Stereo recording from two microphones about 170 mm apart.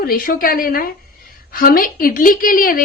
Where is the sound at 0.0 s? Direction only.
60° left (ahead or behind).